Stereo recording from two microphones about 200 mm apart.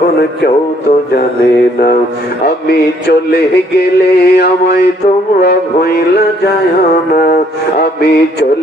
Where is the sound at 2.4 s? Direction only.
55° left (ahead or behind).